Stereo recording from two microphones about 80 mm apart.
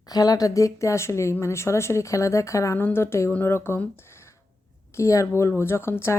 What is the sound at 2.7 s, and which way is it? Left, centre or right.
A woman's voice, left.